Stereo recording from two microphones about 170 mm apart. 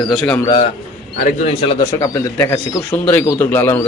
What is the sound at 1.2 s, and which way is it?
Speech, 40° left (ahead or behind).